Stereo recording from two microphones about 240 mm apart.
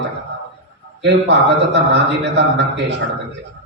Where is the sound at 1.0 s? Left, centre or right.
Right.